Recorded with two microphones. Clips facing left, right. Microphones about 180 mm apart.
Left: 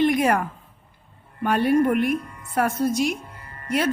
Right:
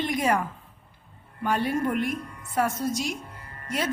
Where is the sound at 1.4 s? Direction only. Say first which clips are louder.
Left 6 dB; 60° left (ahead or behind).